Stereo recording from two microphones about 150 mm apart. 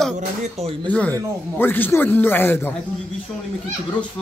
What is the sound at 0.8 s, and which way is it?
Speech, 10° left (ahead or behind).